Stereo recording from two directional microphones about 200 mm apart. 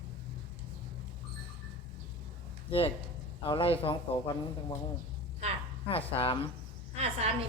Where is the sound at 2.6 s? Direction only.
25° left (ahead or behind).